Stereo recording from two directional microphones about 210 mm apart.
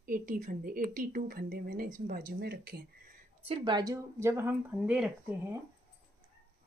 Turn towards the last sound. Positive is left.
turn(degrees=-5)  # may be behind; listen again after turning